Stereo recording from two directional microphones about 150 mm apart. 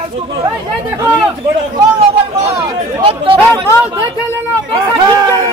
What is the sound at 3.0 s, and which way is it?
Speech, 40° right (ahead or behind).